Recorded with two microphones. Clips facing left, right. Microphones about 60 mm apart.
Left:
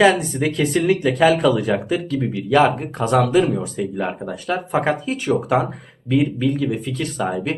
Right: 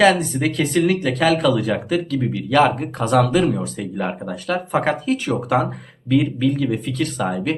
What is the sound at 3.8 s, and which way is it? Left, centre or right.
Speech, centre.